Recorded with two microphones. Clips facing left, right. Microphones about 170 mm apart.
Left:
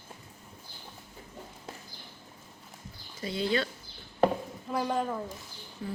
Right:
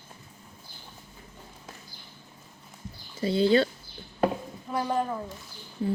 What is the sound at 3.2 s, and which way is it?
Speech, 30° right (ahead or behind).